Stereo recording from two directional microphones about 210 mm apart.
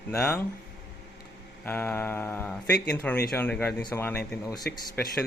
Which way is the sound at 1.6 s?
10° left (ahead or behind).